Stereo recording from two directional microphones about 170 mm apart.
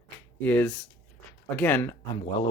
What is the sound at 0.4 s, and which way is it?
Speech, 10° left (ahead or behind).